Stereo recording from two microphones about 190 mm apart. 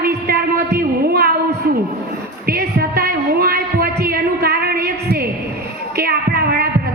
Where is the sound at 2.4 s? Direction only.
55° right (ahead or behind).